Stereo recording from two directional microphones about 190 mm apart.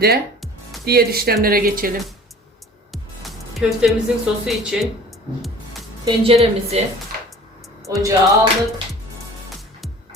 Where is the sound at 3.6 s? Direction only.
5° right (ahead or behind).